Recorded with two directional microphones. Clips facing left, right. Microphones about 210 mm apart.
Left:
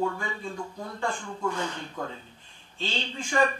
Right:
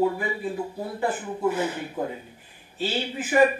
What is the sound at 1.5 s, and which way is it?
Speech, 5° right (ahead or behind).